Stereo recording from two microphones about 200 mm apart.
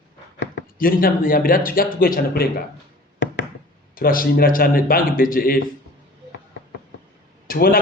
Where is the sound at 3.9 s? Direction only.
45° left (ahead or behind).